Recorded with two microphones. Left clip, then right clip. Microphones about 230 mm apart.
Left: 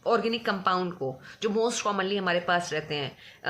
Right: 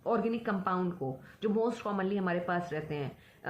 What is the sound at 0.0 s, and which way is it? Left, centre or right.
A woman's voice, left.